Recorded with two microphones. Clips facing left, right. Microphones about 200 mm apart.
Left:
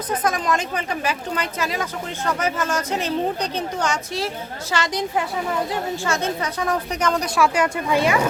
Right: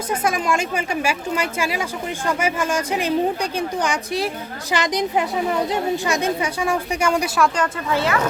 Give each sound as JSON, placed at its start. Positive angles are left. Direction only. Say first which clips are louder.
{"t": 0.1, "sound": "speech", "louder": "right 1 dB", "side_deg": -10}
{"t": 7.3, "sound": "speech", "louder": "left 1 dB", "side_deg": 5}